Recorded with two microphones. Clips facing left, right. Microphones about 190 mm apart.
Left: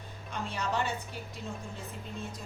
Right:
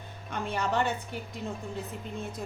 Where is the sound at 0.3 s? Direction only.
60° right (ahead or behind).